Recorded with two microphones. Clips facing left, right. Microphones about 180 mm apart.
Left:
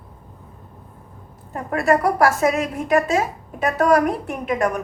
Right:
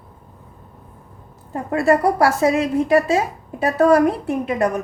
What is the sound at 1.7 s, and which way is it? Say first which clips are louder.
A woman's voice: right 2 dB; 30° right (ahead or behind).